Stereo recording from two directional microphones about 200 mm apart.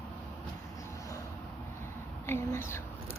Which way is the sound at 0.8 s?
15° left (ahead or behind).